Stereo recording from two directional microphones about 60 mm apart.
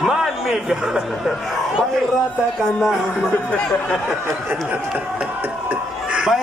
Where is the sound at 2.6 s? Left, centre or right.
Centre.